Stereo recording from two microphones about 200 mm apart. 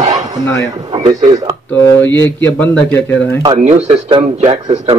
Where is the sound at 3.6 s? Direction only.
30° right (ahead or behind).